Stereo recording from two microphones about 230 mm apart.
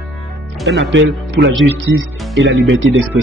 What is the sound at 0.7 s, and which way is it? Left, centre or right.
A man's voice, right.